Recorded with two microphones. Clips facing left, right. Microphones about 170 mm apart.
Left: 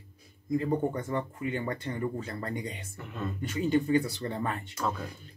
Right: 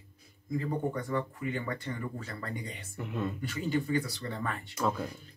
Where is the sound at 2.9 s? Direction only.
10° right (ahead or behind).